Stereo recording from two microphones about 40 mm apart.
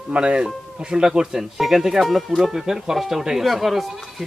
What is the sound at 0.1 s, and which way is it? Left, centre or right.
Speech, right.